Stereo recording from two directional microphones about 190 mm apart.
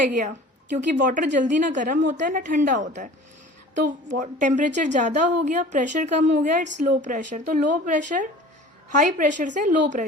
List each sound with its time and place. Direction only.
0.0 s a woman's voice: 40° right (ahead or behind)